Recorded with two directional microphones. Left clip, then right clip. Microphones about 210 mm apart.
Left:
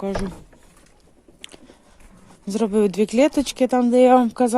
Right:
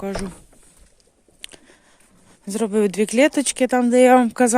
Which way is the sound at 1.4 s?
15° right (ahead or behind).